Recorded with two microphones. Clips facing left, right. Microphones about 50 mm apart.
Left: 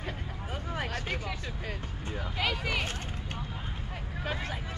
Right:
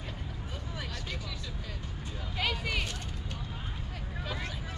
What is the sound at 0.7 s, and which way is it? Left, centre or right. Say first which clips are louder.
Vehicle: left 6 dB; left.